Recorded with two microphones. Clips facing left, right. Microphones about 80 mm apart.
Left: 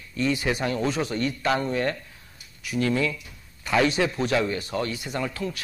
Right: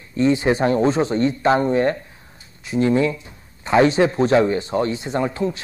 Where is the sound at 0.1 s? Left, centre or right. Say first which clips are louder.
Right 8 dB; right.